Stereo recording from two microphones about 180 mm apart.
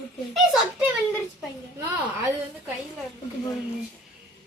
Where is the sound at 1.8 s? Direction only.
15° right (ahead or behind).